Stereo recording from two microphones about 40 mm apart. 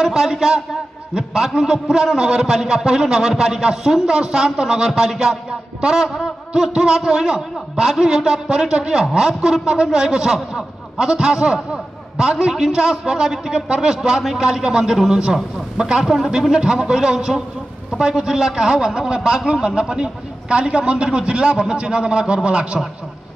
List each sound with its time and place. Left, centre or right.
0.0 s a man's voice: centre